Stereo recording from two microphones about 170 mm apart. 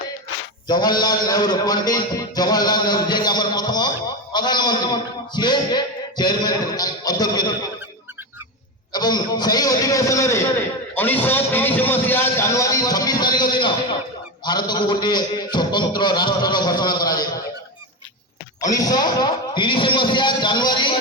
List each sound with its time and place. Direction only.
0.7 s a man's voice: 25° left (ahead or behind)
8.9 s a man's voice: 25° left (ahead or behind)
18.6 s a man's voice: 20° left (ahead or behind)